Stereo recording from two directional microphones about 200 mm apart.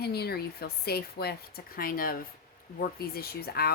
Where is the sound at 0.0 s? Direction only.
55° left (ahead or behind).